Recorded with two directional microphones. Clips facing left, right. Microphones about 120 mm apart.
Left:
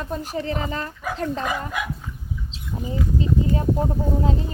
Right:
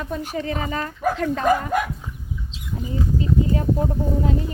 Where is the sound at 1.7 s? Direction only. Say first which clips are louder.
Right 7 dB; 50° right (ahead or behind).